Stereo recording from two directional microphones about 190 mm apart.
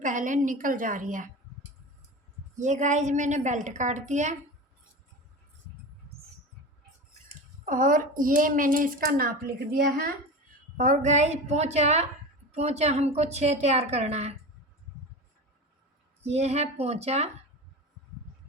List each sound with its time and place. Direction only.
0.0 s speech: 40° right (ahead or behind)
2.6 s a woman's voice: 40° right (ahead or behind)
7.6 s a woman's voice: 45° right (ahead or behind)
16.2 s a woman's voice: 35° right (ahead or behind)